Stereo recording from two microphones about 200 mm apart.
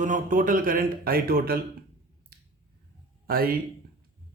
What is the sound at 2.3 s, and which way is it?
Finger snapping, 50° right (ahead or behind).